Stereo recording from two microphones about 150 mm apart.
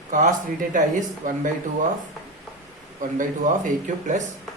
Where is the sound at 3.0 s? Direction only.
60° right (ahead or behind).